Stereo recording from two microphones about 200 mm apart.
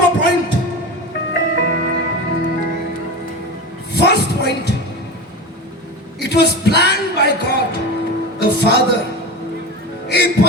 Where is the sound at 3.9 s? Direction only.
55° left (ahead or behind).